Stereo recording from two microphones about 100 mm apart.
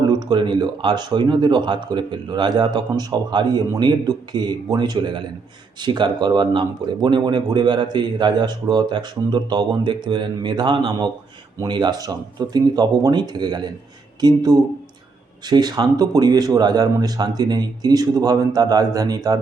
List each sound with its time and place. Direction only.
0.1 s speech: 45° right (ahead or behind)